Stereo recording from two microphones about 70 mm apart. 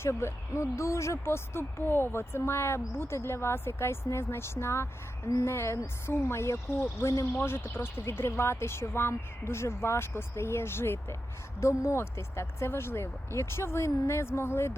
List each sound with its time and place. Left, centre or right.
0.0 s speech: left
7.4 s speech: left
11.6 s speech: left